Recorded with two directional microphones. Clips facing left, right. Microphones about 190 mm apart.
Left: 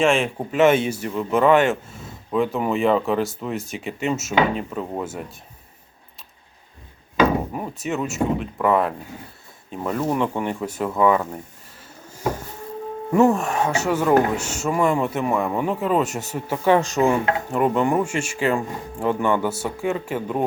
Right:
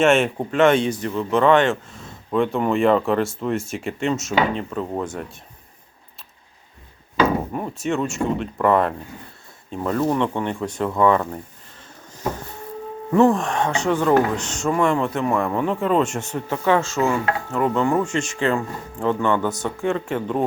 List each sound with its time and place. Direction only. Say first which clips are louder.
0.0 s speech: right 2 dB; 5° right (ahead or behind)
7.5 s speech: right 3 dB; 5° left (ahead or behind)
12.0 s a sound: left 2 dB; 10° left (ahead or behind)
13.1 s speech: right 1 dB; 10° left (ahead or behind)
16.6 s speech: left 2 dB; 15° left (ahead or behind)